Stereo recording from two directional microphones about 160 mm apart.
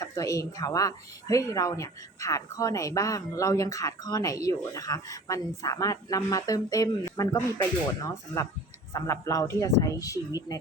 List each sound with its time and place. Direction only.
0.0 s a woman's voice: 20° left (ahead or behind)